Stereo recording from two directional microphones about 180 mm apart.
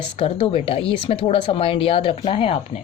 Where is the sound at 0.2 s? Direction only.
30° left (ahead or behind).